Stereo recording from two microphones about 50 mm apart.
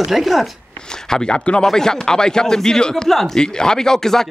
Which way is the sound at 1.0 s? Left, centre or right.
Centre.